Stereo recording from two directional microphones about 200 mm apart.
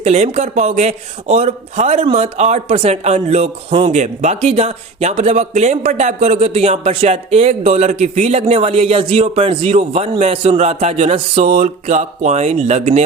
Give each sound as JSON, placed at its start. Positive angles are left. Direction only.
{"t": 0.0, "sound": "a man's voice", "side_deg": -30}